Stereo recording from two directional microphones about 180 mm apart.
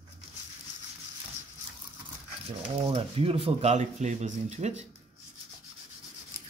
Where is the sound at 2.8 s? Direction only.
30° right (ahead or behind).